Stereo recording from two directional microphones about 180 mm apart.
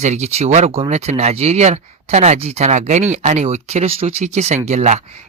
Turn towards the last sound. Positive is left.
turn(degrees=-40)  # may be behind; listen again after turning